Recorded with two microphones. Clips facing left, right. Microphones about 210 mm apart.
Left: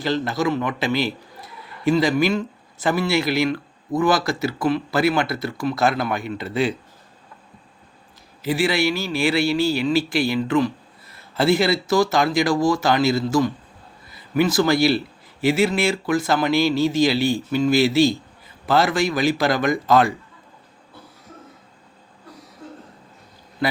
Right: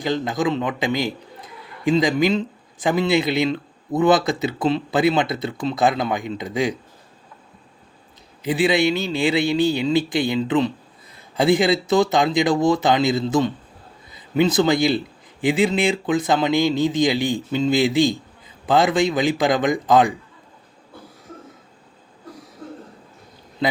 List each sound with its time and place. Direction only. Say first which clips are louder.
0.0 s a man's voice: even; 15° right (ahead or behind)
8.4 s a man's voice: right 2 dB; 20° right (ahead or behind)